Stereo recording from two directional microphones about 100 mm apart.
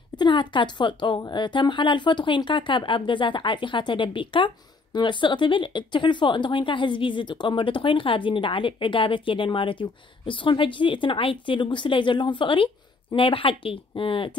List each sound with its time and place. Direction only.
0.2 s speech: 50° left (ahead or behind)